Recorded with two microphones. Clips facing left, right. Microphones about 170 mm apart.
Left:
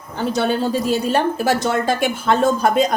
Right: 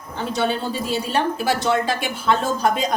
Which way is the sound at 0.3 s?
45° left (ahead or behind).